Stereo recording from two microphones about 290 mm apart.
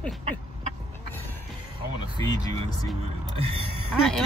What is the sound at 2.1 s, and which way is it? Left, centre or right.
A woman's voice, centre.